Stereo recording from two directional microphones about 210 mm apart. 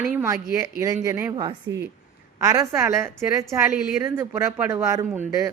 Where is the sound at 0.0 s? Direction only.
10° right (ahead or behind).